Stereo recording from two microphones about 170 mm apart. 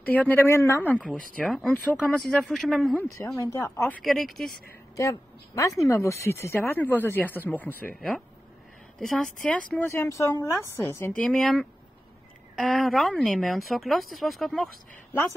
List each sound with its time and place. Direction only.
0.0 s speech: 10° left (ahead or behind)
3.2 s speech: 20° left (ahead or behind)
4.0 s speech: centre (ahead or behind)
4.9 s a woman's voice: 20° left (ahead or behind)
11.2 s speech: centre (ahead or behind)